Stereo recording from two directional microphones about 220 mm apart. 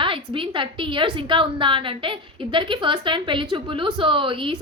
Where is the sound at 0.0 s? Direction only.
25° right (ahead or behind).